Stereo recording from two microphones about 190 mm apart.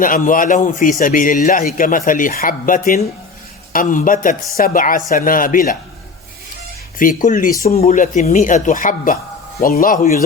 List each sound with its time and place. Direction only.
0.0 s speech: 45° left (ahead or behind)
7.0 s speech: 45° left (ahead or behind)